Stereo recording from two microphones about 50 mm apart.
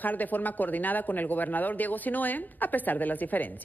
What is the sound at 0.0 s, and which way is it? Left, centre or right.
A man's voice, left.